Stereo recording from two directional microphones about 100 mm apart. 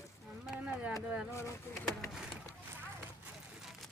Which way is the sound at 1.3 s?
30° left (ahead or behind).